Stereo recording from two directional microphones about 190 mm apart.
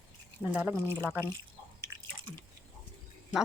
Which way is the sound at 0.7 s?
10° left (ahead or behind).